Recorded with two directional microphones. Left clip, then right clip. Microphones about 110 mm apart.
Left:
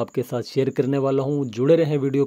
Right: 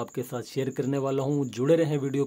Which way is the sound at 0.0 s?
50° left (ahead or behind).